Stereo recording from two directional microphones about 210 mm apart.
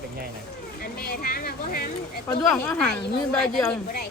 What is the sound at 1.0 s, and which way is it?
Speech, 45° left (ahead or behind).